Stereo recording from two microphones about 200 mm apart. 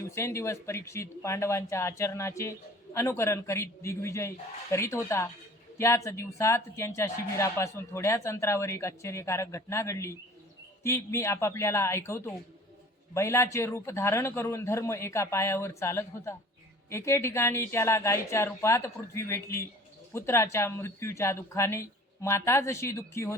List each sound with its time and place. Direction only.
0.1 s speech: 15° left (ahead or behind)